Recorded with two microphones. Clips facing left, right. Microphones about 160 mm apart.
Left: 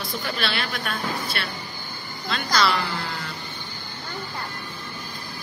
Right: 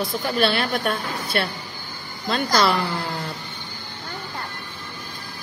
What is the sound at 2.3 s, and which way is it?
Speech, 45° right (ahead or behind).